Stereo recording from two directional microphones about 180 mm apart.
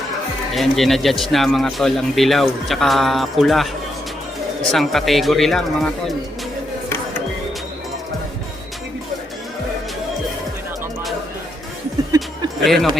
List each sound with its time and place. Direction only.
0.5 s speech: centre (ahead or behind)
12.1 s music: 20° right (ahead or behind)
12.6 s speech: centre (ahead or behind)